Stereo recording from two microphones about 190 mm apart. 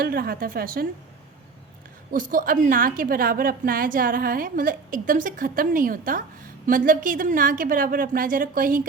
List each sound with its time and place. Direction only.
0.0 s a woman's voice: 50° right (ahead or behind)
2.1 s a woman's voice: 45° right (ahead or behind)